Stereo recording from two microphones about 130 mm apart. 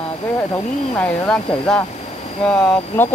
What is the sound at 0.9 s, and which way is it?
Speech, 10° left (ahead or behind).